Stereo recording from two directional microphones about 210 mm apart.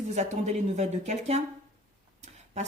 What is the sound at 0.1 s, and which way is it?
Speech, 35° right (ahead or behind).